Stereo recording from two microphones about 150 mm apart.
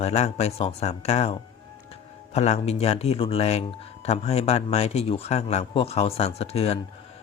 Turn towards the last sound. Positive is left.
turn(degrees=40)  # may be behind; listen again after turning